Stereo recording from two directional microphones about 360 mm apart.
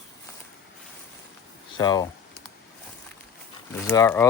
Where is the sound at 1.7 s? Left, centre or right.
Centre.